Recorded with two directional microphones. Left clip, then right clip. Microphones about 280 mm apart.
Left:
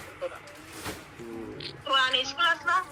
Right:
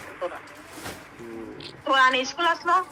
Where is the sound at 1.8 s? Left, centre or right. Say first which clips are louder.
Right 5 dB; right.